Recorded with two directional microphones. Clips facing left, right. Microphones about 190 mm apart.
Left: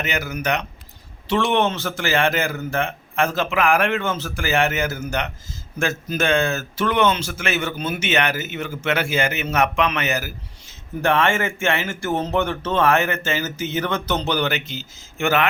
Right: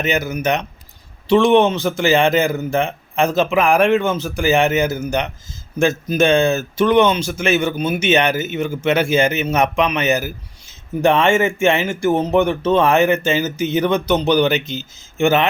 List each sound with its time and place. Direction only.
0.0 s a man's voice: 20° right (ahead or behind)